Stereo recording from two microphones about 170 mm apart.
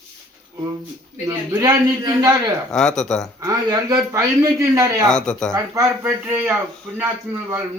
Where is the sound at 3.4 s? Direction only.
20° right (ahead or behind).